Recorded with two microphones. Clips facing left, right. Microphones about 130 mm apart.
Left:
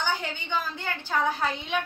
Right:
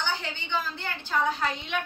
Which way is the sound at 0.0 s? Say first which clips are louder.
Left 2 dB; 15° left (ahead or behind).